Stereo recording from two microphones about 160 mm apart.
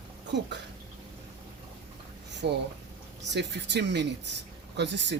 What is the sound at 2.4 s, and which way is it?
Speech, 90° right.